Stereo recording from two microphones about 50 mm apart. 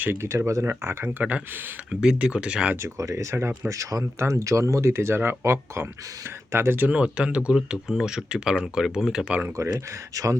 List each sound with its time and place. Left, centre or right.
0.2 s speech: right
1.9 s speech: centre
2.8 s speech: right
3.7 s speech: right
6.5 s speech: right
6.8 s speech: right
9.6 s speech: right